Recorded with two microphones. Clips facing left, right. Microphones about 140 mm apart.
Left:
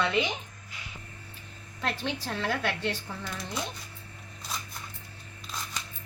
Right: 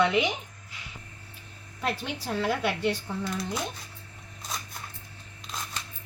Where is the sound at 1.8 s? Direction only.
10° right (ahead or behind).